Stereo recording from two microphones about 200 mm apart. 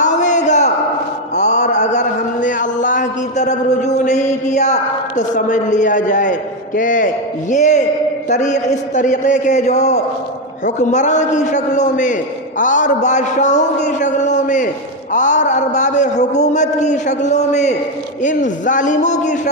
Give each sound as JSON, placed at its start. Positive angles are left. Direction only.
{"t": 0.0, "sound": "a sound", "side_deg": 40}
{"t": 1.3, "sound": "mantra", "side_deg": 35}
{"t": 8.3, "sound": "a man's voice", "side_deg": 35}